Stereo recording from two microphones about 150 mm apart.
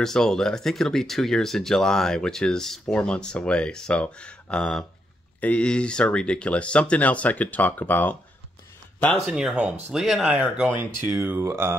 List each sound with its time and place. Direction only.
0.0 s speech: 5° left (ahead or behind)
9.2 s speech: 5° right (ahead or behind)